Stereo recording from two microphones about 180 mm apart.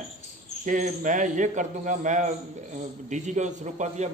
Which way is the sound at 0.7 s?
45° right (ahead or behind).